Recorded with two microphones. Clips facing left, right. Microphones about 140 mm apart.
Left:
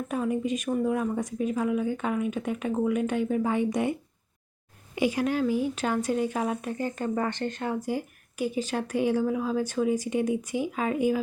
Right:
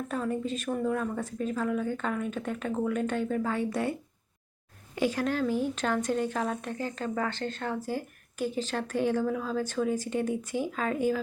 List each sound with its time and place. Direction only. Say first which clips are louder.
0.1 s speech: left 5 dB; 10° left (ahead or behind)
4.9 s speech: left 2 dB; 10° left (ahead or behind)